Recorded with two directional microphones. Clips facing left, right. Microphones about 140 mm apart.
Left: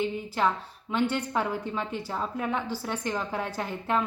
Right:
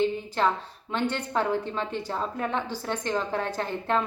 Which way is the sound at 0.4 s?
10° left (ahead or behind).